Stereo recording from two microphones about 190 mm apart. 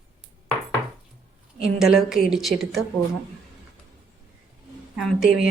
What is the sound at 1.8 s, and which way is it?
Speech, centre (ahead or behind).